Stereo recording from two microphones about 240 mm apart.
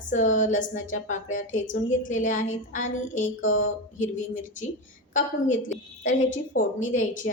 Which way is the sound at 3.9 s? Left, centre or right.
Left.